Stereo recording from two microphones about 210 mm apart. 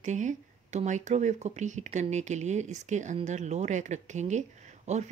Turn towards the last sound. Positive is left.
turn(degrees=-35)  # may be behind; listen again after turning